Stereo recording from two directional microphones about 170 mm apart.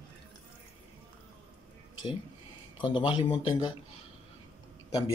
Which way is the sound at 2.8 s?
30° left (ahead or behind).